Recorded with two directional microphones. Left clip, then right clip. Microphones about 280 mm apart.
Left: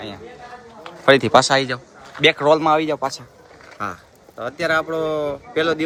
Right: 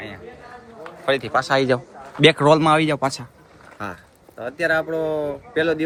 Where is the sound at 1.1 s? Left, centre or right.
Left.